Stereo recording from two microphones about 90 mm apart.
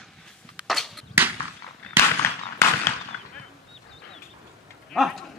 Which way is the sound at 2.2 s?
25° left (ahead or behind).